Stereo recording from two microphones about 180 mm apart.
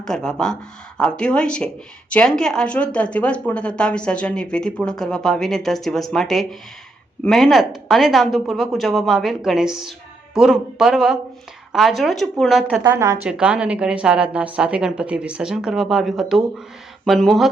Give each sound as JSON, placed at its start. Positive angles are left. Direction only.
{"t": 0.0, "sound": "speech", "side_deg": 5}
{"t": 12.8, "sound": "a woman's voice", "side_deg": -15}
{"t": 13.2, "sound": "speech", "side_deg": -5}